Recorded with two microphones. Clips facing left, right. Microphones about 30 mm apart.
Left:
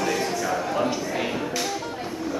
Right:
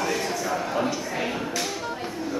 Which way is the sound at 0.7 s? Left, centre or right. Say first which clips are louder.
Left 2 dB; centre.